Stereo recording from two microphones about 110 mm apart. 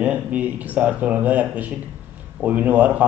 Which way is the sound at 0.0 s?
15° right (ahead or behind).